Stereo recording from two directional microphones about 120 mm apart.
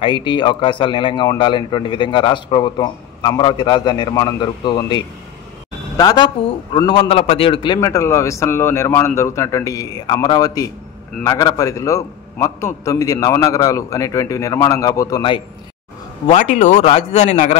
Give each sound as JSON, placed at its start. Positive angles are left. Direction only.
{"t": 0.0, "sound": "a man's voice", "side_deg": 45}
{"t": 7.8, "sound": "a man's voice", "side_deg": 25}
{"t": 16.3, "sound": "speech", "side_deg": 90}
{"t": 16.9, "sound": "a man's voice", "side_deg": 65}